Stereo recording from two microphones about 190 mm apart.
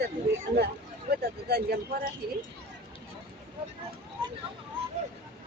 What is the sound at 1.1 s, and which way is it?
Speech, 55° right (ahead or behind).